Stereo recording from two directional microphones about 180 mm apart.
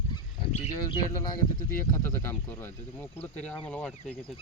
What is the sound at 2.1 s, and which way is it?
Speech, 15° left (ahead or behind).